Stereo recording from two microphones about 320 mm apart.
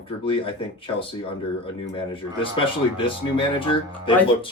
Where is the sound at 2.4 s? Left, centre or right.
Centre.